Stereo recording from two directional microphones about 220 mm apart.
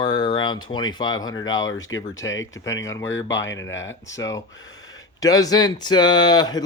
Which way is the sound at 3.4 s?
60° left (ahead or behind).